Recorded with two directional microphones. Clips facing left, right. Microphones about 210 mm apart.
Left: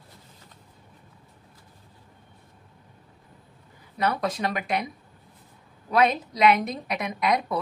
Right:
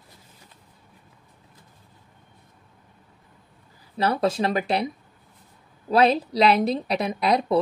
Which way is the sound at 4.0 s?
30° right (ahead or behind).